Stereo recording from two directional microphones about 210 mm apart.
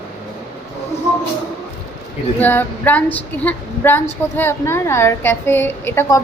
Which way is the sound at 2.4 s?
10° left (ahead or behind).